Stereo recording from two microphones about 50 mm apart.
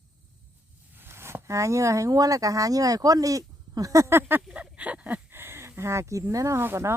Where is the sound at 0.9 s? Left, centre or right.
Right.